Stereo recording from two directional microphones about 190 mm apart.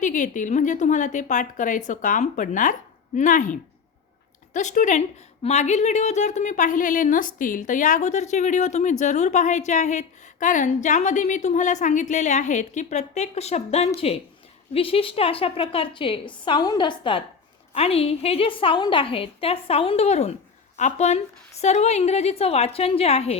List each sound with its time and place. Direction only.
0.0 s a woman's voice: 40° left (ahead or behind)